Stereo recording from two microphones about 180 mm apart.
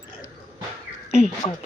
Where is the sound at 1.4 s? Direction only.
25° left (ahead or behind).